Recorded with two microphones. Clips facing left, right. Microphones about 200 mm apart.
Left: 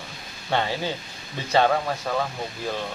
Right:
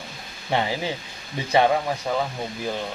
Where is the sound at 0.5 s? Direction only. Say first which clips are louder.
Right 1 dB; 15° right (ahead or behind).